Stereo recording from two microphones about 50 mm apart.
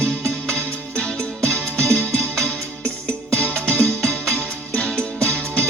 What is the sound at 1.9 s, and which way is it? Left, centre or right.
Music, centre.